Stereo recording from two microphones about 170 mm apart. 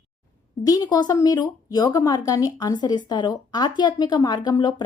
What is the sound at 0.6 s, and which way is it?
Speech, 20° left (ahead or behind).